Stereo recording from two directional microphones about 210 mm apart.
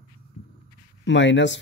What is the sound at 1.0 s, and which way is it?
Speech, 60° left (ahead or behind).